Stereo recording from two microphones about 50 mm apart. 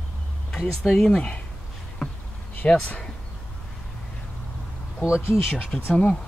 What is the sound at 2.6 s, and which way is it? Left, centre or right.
Speech, left.